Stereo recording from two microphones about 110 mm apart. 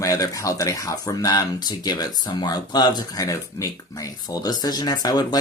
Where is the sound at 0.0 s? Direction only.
30° left (ahead or behind).